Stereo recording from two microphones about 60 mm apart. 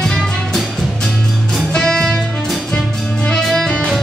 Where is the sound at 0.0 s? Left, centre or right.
Centre.